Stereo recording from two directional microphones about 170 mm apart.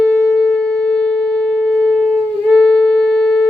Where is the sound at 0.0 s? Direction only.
5° left (ahead or behind).